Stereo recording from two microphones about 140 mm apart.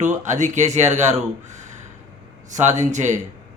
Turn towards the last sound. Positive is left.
turn(degrees=-60)  # may be behind; listen again after turning